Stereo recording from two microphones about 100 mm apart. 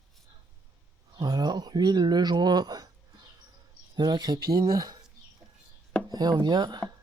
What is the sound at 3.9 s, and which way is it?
Speech, 45° right (ahead or behind).